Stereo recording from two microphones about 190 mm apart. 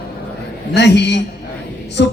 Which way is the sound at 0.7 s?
65° left (ahead or behind).